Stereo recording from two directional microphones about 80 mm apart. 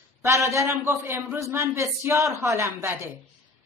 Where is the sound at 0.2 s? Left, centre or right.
Right.